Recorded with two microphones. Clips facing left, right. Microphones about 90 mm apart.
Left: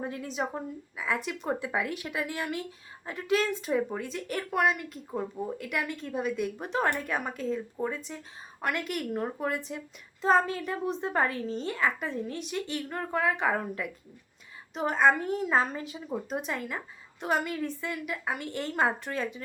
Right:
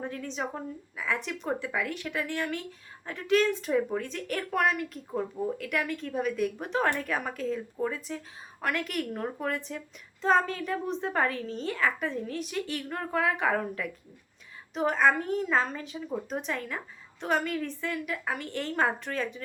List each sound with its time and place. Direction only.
0.0 s a woman's voice: 10° left (ahead or behind)
1.5 s a woman's voice: 20° left (ahead or behind); by 15.4 s centre (ahead or behind)
15.4 s a woman's voice: 15° left (ahead or behind)